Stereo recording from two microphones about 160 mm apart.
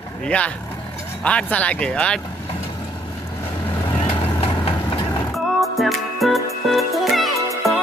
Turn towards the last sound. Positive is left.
turn(degrees=0)  # may be behind; listen again after turning